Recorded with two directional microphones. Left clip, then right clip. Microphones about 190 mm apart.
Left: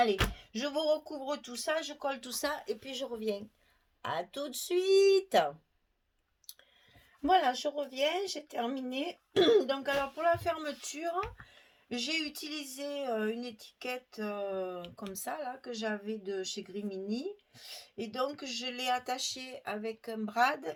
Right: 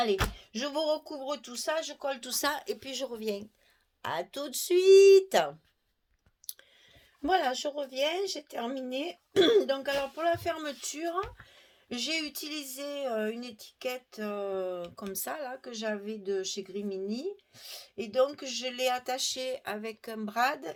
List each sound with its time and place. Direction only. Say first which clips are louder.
0.0 s speech: even; 35° right (ahead or behind)
6.4 s clicking: right 5 dB; 40° right (ahead or behind)
7.3 s speech: left 1 dB; 40° right (ahead or behind)